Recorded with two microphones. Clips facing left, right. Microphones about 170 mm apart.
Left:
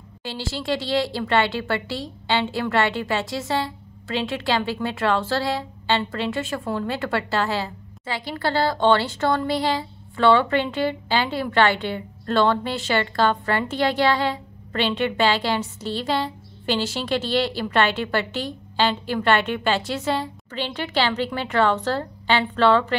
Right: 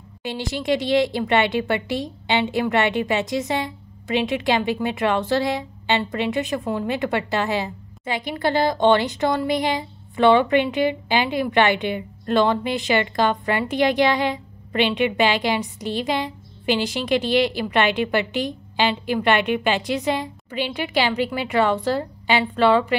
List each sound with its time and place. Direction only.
0.2 s speech: 20° right (ahead or behind)